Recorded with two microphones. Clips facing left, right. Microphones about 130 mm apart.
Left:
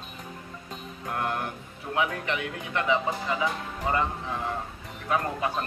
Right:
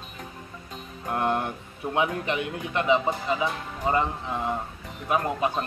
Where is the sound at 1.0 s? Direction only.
25° right (ahead or behind).